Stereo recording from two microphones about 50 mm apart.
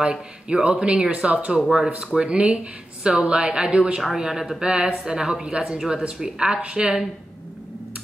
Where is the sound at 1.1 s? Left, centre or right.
Right.